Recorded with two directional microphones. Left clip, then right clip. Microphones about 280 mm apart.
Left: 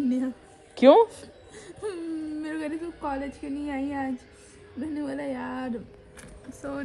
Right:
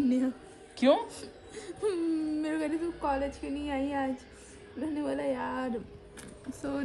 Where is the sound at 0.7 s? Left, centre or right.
Centre.